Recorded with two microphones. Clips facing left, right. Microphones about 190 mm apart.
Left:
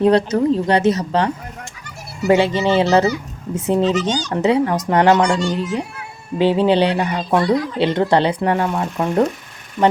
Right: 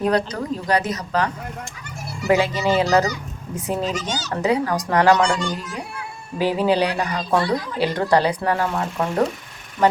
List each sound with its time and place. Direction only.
0.0 s speech: 25° left (ahead or behind)
3.9 s speech: 10° right (ahead or behind)
4.3 s speech: 25° left (ahead or behind)
6.4 s speech: 25° left (ahead or behind)